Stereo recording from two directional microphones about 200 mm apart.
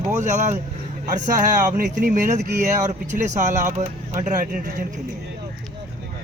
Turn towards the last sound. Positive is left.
turn(degrees=-40)  # may be behind; listen again after turning